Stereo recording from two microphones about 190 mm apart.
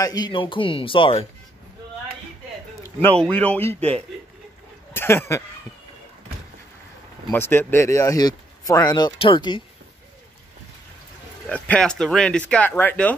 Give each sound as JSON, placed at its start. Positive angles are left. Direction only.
{"t": 0.0, "sound": "speech", "side_deg": 20}
{"t": 3.3, "sound": "speech", "side_deg": 5}
{"t": 3.6, "sound": "speech", "side_deg": -30}
{"t": 4.9, "sound": "speech", "side_deg": 15}
{"t": 7.2, "sound": "speech", "side_deg": 10}
{"t": 11.4, "sound": "speech", "side_deg": 5}